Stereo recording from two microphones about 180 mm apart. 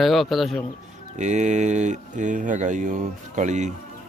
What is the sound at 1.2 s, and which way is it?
Speech, 40° right (ahead or behind).